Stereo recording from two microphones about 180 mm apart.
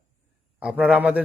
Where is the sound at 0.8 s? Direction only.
5° right (ahead or behind).